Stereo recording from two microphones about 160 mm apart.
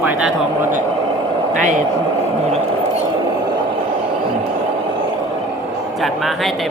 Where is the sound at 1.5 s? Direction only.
50° right (ahead or behind).